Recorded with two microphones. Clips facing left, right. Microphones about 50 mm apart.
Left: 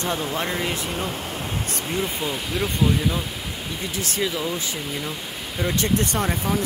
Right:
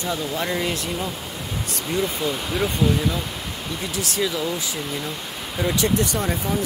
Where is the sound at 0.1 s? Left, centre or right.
Left.